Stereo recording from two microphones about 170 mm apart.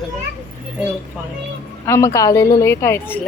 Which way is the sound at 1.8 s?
15° left (ahead or behind).